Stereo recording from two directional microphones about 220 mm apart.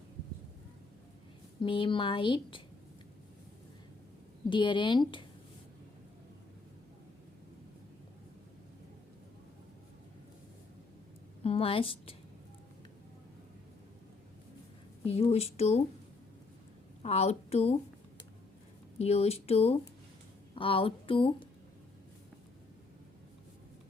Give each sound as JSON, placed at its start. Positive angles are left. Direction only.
{"t": 1.6, "sound": "a woman's voice", "side_deg": 25}
{"t": 4.4, "sound": "a woman's voice", "side_deg": 20}
{"t": 11.4, "sound": "a woman's voice", "side_deg": 25}
{"t": 15.0, "sound": "a woman's voice", "side_deg": 25}
{"t": 17.0, "sound": "a woman's voice", "side_deg": 30}
{"t": 18.9, "sound": "a woman's voice", "side_deg": 30}